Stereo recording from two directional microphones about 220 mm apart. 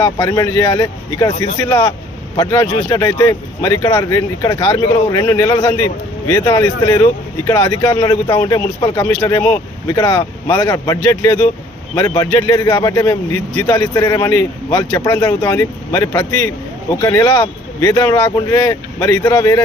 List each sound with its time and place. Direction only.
0.0 s speech: 20° left (ahead or behind)